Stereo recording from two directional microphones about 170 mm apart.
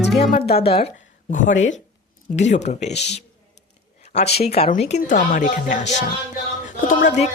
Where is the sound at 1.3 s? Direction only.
50° left (ahead or behind).